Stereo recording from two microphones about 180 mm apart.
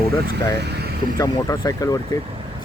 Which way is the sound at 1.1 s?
20° left (ahead or behind).